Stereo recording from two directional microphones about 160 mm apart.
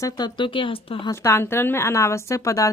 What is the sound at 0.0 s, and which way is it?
Speech, 30° left (ahead or behind).